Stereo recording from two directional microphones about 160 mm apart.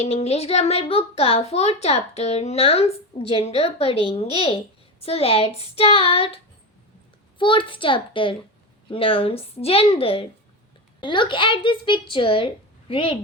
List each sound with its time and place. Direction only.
0.0 s a child's voice: 40° left (ahead or behind)